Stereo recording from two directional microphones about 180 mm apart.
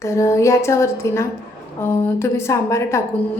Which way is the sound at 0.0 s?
15° left (ahead or behind).